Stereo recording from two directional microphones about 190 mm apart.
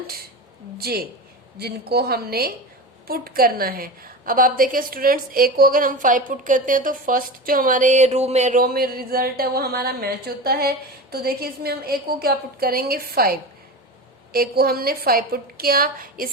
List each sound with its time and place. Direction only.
0.8 s a woman's voice: 55° right (ahead or behind)